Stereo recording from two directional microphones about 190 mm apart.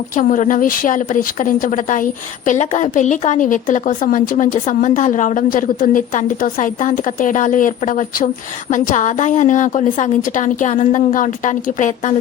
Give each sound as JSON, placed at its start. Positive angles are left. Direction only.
{"t": 0.2, "sound": "a woman's voice", "side_deg": 45}